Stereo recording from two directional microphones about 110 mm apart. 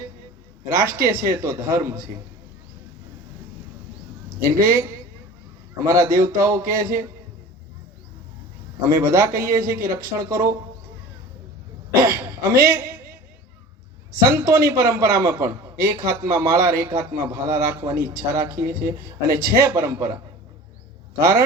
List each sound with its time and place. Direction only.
0.8 s a man's voice: 25° right (ahead or behind)
4.4 s a man's voice: 25° right (ahead or behind)
8.8 s a man's voice: 25° right (ahead or behind)
12.0 s a man's voice: 25° right (ahead or behind)
14.2 s a man's voice: 25° right (ahead or behind)
21.2 s a man's voice: 25° right (ahead or behind)